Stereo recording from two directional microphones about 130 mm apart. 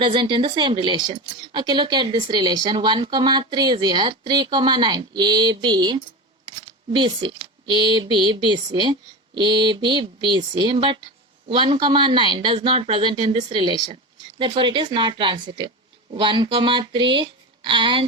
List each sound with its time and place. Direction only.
0.0 s speech: 35° right (ahead or behind)